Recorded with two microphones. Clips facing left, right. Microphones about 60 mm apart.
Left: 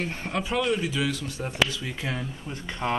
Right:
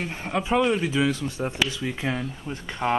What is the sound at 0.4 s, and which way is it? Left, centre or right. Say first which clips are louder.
Speech: right 4 dB; right.